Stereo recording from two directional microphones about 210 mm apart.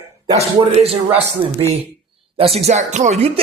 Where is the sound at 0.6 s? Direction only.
30° right (ahead or behind).